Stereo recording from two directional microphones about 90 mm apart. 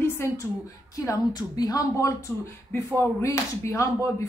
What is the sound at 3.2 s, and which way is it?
Speech, 35° left (ahead or behind).